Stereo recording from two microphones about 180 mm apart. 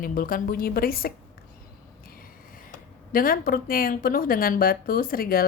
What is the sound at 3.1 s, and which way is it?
Speech, 50° left (ahead or behind).